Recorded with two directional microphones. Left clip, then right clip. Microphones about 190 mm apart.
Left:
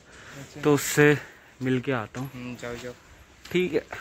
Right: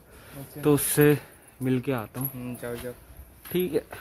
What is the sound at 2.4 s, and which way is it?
Speech, 40° right (ahead or behind).